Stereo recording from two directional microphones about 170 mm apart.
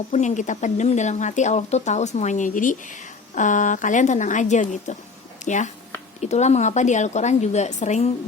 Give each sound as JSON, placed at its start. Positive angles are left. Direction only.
{"t": 0.1, "sound": "speech", "side_deg": 45}